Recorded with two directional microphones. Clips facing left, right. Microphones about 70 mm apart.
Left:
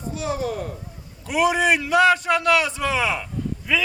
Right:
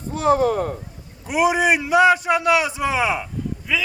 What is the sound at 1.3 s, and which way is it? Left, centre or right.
A man's voice, centre.